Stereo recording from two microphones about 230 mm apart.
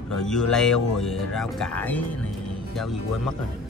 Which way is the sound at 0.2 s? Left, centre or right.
Centre.